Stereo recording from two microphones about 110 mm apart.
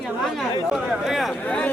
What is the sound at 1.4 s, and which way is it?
Speech, 10° left (ahead or behind).